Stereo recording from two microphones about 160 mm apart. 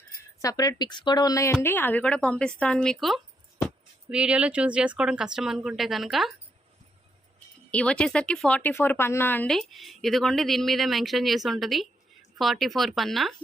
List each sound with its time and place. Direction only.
0.3 s a woman's voice: 20° left (ahead or behind); by 6.3 s centre (ahead or behind)
7.3 s speech: 5° left (ahead or behind)